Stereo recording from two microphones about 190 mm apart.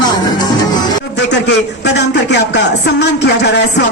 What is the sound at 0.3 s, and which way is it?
Music, 20° left (ahead or behind).